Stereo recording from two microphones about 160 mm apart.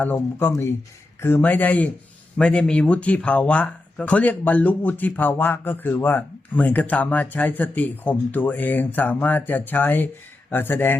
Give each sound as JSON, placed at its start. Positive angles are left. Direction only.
{"t": 0.0, "sound": "speech", "side_deg": 10}